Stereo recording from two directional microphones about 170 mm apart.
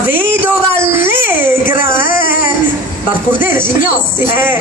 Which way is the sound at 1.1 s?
55° left (ahead or behind).